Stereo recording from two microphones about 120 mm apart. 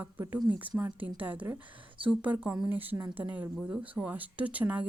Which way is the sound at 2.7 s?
15° right (ahead or behind).